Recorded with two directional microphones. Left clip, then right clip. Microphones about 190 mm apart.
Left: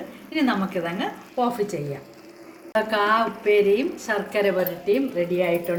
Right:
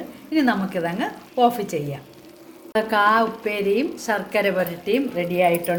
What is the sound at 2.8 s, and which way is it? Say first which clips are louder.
A woman's voice: right 3 dB; 50° right (ahead or behind).